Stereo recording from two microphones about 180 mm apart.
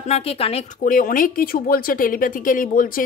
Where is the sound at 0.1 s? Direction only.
35° left (ahead or behind).